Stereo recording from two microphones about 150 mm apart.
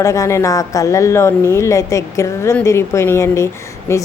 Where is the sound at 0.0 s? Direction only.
20° left (ahead or behind).